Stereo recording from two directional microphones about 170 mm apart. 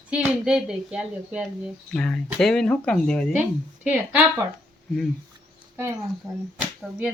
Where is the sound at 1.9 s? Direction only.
5° left (ahead or behind).